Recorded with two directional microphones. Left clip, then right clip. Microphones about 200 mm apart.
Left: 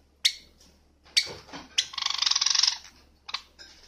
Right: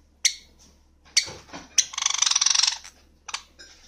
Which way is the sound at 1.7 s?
10° right (ahead or behind).